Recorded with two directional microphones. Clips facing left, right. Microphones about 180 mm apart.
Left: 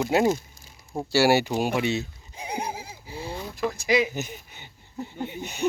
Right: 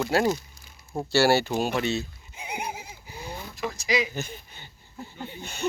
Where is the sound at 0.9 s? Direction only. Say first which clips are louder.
Left 1 dB; 5° left (ahead or behind).